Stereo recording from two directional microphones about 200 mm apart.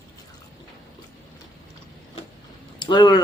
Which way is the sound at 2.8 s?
20° left (ahead or behind).